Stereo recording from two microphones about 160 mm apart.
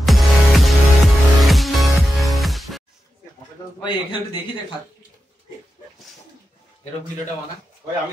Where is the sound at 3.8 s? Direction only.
30° left (ahead or behind).